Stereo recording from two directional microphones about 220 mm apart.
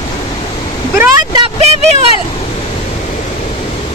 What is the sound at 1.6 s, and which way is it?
Vehicle, 30° right (ahead or behind).